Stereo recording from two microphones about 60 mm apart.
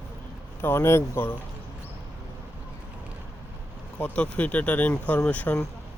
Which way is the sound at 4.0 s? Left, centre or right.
Left.